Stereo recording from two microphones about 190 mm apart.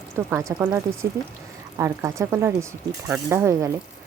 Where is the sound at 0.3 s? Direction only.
10° right (ahead or behind).